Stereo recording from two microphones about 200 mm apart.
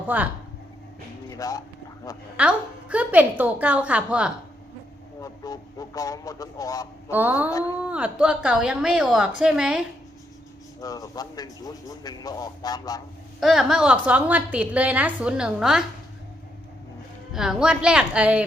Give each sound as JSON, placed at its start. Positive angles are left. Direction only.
{"t": 0.1, "sound": "a woman's voice", "side_deg": -10}
{"t": 1.3, "sound": "speech", "side_deg": 15}
{"t": 2.3, "sound": "a woman's voice", "side_deg": -5}
{"t": 5.2, "sound": "speech", "side_deg": 20}
{"t": 7.1, "sound": "a woman's voice", "side_deg": -10}
{"t": 10.8, "sound": "a man's voice", "side_deg": 15}
{"t": 13.4, "sound": "a woman's voice", "side_deg": 0}
{"t": 17.3, "sound": "a woman's voice", "side_deg": 0}